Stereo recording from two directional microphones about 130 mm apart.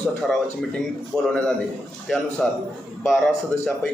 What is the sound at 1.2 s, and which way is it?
A man's voice, 5° left (ahead or behind).